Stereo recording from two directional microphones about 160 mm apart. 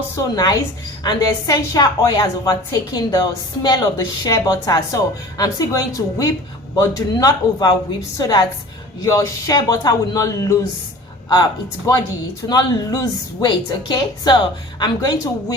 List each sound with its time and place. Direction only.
0.2 s a woman's voice: 25° left (ahead or behind)
11.9 s a woman's voice: 20° left (ahead or behind)